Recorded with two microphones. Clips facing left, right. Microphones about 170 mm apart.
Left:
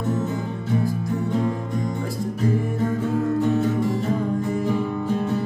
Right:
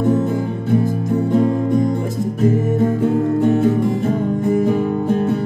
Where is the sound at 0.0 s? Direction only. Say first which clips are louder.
Right 8 dB; 55° right (ahead or behind).